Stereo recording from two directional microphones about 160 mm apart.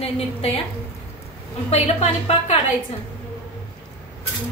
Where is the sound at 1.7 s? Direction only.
45° left (ahead or behind).